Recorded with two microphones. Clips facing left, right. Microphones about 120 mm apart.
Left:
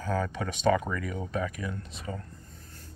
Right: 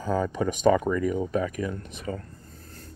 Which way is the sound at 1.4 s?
35° right (ahead or behind).